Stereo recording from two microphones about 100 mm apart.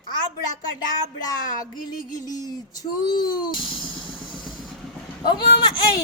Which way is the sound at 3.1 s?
45° left (ahead or behind).